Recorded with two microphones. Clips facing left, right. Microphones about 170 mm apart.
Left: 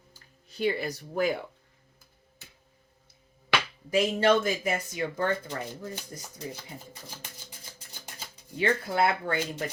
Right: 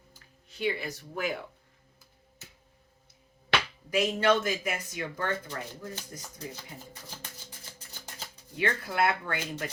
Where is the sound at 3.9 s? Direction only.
30° left (ahead or behind).